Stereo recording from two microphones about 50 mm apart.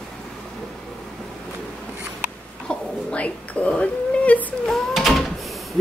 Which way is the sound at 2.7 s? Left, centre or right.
Left.